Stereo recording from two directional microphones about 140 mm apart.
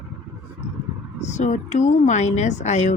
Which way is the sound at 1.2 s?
60° left (ahead or behind).